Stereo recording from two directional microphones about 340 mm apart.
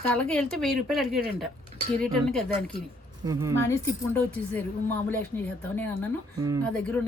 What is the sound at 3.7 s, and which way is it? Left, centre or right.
A woman's voice, centre.